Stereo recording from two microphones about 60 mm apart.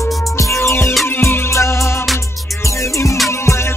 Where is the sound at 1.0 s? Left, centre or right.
Left.